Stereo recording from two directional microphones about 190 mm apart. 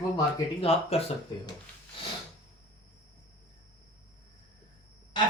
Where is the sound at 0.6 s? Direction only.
30° left (ahead or behind).